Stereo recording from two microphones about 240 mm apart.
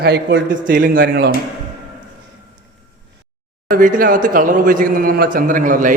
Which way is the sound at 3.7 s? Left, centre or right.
Right.